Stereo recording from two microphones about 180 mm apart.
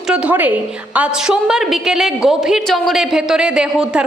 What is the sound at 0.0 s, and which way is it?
A woman's voice, 5° right (ahead or behind).